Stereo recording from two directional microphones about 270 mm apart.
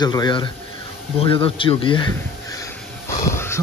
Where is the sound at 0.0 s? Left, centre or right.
Centre.